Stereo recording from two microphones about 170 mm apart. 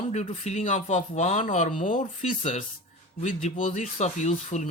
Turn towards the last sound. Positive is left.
turn(degrees=45)  # may be behind; listen again after turning